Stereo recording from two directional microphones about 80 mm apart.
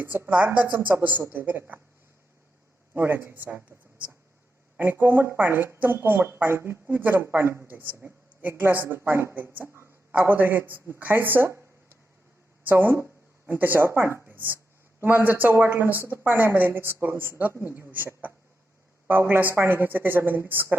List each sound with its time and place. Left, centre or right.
0.0 s a woman's voice: right
2.9 s a woman's voice: right
4.8 s a woman's voice: right
9.3 s a woman's voice: right
14.3 s a sound: right
15.0 s a woman's voice: right